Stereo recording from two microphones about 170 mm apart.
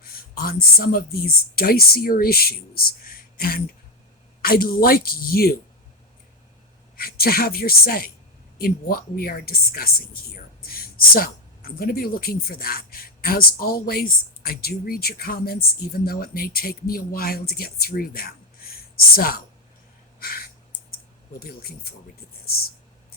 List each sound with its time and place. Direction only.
0.0 s speech: 60° left (ahead or behind)
6.9 s speech: 60° left (ahead or behind)
18.7 s a sound: 60° left (ahead or behind)
21.3 s speech: 65° left (ahead or behind)